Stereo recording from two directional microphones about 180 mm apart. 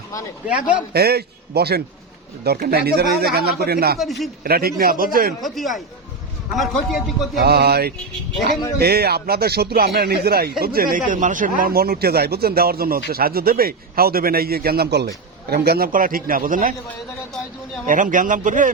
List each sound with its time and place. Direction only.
0.9 s speech: 60° right (ahead or behind)
3.9 s a man's voice: centre (ahead or behind)
4.4 s speech: 60° right (ahead or behind)
5.4 s a man's voice: centre (ahead or behind)
7.4 s speech: 60° right (ahead or behind)
17.8 s speech: 45° right (ahead or behind)